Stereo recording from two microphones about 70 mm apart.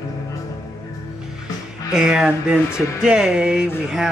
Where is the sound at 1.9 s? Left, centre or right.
Centre.